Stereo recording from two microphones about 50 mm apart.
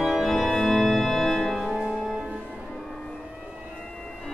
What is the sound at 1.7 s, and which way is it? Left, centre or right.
Music, centre.